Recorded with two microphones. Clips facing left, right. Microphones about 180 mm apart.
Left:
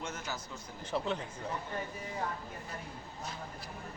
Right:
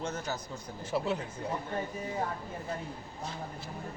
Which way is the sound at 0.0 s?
35° right (ahead or behind).